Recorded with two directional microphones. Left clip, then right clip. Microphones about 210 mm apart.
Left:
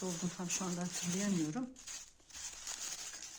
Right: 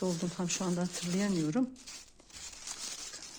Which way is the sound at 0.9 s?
Centre (ahead or behind).